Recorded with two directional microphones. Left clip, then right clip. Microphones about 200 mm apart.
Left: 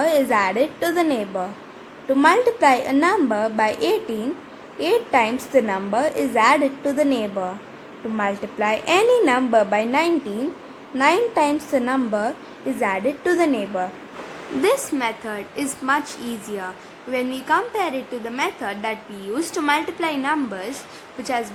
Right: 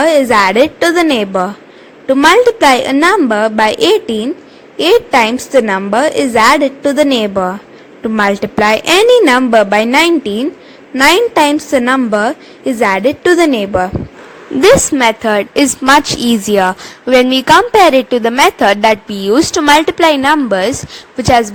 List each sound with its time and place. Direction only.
0.0 s a woman's voice: 35° right (ahead or behind)